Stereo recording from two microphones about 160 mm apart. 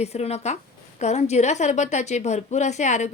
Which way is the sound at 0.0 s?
40° left (ahead or behind).